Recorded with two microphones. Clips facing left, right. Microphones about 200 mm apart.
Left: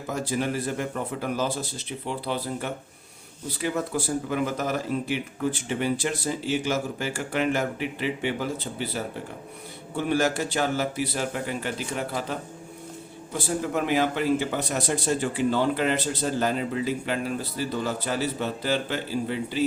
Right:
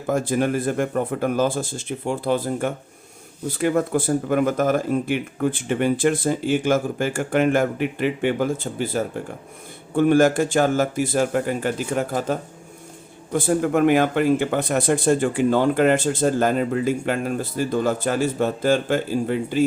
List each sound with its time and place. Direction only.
0.1 s speech: 50° right (ahead or behind)